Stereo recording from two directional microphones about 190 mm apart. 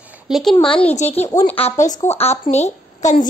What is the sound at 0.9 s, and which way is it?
A woman's voice, 35° left (ahead or behind).